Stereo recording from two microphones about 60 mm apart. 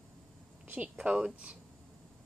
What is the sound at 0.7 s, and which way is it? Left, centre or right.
Speech, right.